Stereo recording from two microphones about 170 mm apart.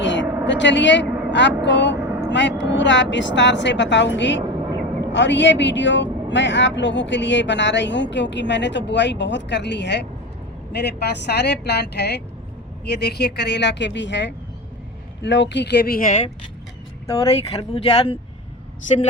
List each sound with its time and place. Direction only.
0.0 s vehicle: 90° left
0.4 s speech: 90° left
10.7 s speech: 75° left (ahead or behind); by 16.2 s 50° left (ahead or behind)
17.1 s speech: 35° left (ahead or behind)